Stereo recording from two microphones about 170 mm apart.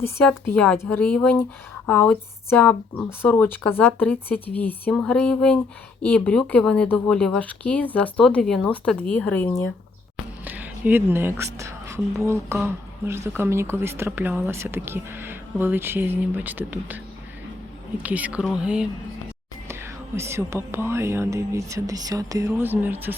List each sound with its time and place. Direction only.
0.0 s a woman's voice: 15° left (ahead or behind)
10.4 s speech: 10° right (ahead or behind)
18.0 s speech: 10° right (ahead or behind)